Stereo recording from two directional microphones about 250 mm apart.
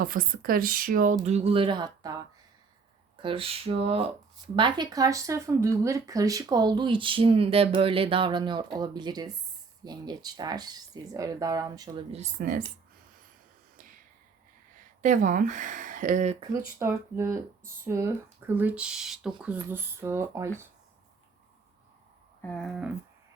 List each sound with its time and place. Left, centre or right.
0.0 s speech: right; by 2.1 s centre
3.2 s speech: right
15.0 s speech: right
16.5 s speech: centre
22.4 s speech: centre